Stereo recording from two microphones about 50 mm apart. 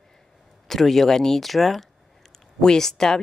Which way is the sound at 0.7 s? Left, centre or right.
Centre.